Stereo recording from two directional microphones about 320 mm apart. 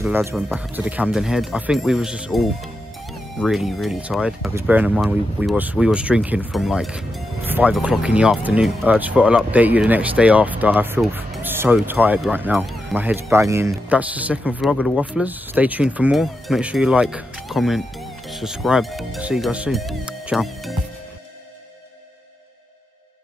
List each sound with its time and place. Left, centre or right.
0.0 s speech: centre